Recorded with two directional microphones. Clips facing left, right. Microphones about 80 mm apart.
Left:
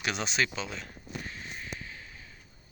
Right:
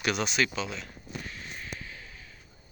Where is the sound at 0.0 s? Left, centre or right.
Left.